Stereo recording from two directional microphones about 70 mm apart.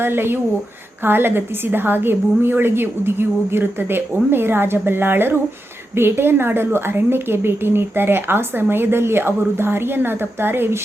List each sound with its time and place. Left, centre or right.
0.0 s speech: right